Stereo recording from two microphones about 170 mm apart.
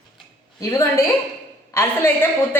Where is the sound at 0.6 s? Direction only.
20° left (ahead or behind).